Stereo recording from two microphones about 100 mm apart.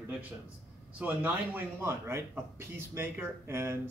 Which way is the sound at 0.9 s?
15° right (ahead or behind).